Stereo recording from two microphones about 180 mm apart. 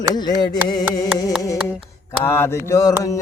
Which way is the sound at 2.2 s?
10° left (ahead or behind).